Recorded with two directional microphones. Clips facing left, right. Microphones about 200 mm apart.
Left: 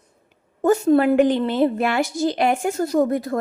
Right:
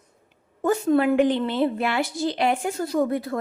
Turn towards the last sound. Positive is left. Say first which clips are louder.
# left 4 dB
turn(degrees=45)  # may be behind; listen again after turning